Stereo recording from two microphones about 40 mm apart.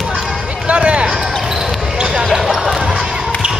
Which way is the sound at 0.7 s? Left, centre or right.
Right.